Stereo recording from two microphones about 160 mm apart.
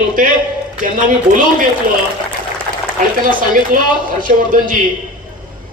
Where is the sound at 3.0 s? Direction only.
55° right (ahead or behind).